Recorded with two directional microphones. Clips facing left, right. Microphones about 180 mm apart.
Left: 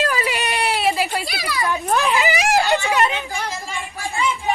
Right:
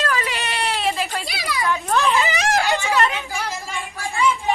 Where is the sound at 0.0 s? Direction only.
10° left (ahead or behind).